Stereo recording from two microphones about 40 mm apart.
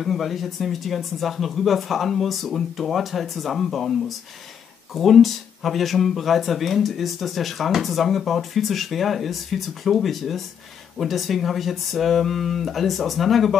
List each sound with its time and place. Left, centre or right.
0.0 s speech: centre
4.9 s speech: centre